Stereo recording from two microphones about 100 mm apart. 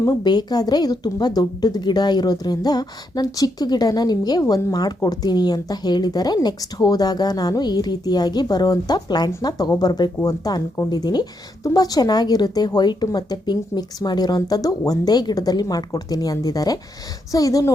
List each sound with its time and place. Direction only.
0.2 s a woman's voice: 45° left (ahead or behind)